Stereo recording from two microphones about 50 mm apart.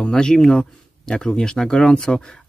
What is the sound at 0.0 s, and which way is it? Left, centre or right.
Speech, centre.